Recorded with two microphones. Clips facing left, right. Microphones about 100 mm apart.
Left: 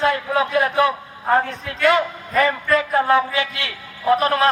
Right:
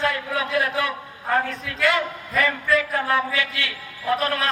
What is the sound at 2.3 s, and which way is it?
Speech, 45° left (ahead or behind).